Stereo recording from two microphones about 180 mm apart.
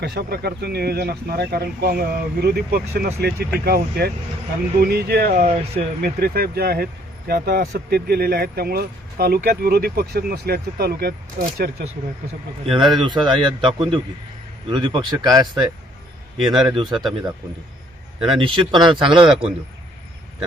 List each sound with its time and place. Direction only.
0.0 s speech: 65° right (ahead or behind)
5.4 s speech: 35° right (ahead or behind)
6.0 s speech: 60° right (ahead or behind)
12.6 s speech: 25° right (ahead or behind)
16.5 s speech: 25° right (ahead or behind)
18.3 s speech: 25° right (ahead or behind)